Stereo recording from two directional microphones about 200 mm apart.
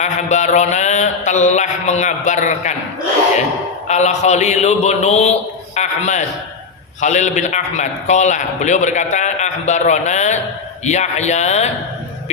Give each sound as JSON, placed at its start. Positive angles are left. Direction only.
{"t": 0.0, "sound": "a man's voice", "side_deg": 35}
{"t": 3.8, "sound": "a man's voice", "side_deg": 35}